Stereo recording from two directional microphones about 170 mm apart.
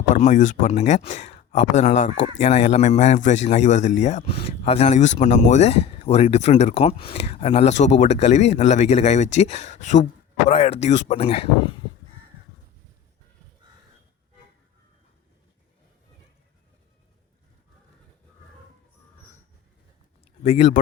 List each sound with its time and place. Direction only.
0.1 s a man's voice: 50° left (ahead or behind)
20.4 s a man's voice: 40° left (ahead or behind)